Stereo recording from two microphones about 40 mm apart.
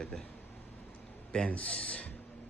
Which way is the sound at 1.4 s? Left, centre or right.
Left.